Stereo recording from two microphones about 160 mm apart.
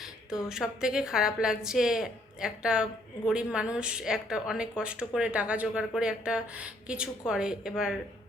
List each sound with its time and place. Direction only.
0.3 s speech: 5° right (ahead or behind)